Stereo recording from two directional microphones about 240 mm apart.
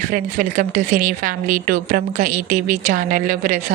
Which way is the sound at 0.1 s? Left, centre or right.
Right.